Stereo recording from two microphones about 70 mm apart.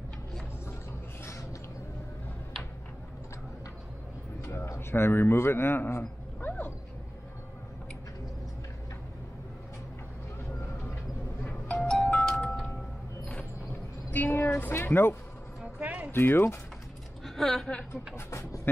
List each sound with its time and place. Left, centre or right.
4.5 s a sound: left
10.6 s vehicle: left
11.6 s music: centre
13.2 s a sound: centre
14.1 s music: left
14.8 s speech: left
15.6 s a sound: centre
16.1 s speech: left
17.4 s a woman's voice: centre
18.1 s speech: left